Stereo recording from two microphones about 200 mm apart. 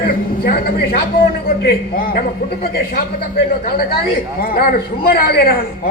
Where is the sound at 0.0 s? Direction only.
50° left (ahead or behind).